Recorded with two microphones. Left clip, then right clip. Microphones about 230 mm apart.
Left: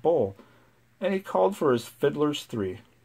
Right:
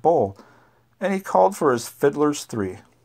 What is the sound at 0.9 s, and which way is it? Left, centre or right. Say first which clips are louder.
Speech: right 6 dB; right.